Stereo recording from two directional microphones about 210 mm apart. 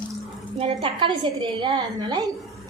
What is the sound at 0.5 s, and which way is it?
A woman's voice, 25° right (ahead or behind).